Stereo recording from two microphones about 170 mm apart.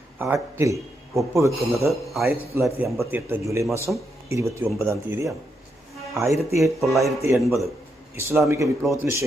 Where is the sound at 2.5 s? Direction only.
15° right (ahead or behind).